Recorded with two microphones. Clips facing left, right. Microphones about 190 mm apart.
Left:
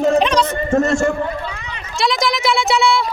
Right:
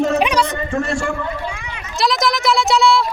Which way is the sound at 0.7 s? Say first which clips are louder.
Left 6 dB; 45° left (ahead or behind).